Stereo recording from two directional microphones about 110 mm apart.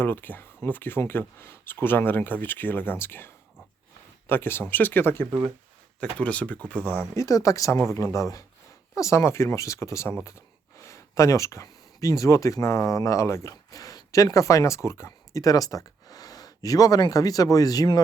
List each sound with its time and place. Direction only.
0.0 s speech: 20° left (ahead or behind)
7.2 s speech: 30° left (ahead or behind)